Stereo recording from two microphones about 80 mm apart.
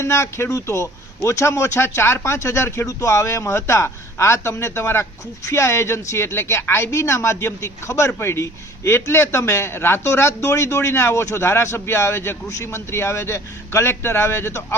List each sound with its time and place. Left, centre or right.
0.0 s speech: left